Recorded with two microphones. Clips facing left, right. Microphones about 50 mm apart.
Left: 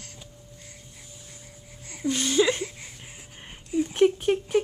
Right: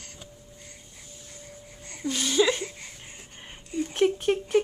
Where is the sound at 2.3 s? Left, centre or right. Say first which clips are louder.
Even; centre.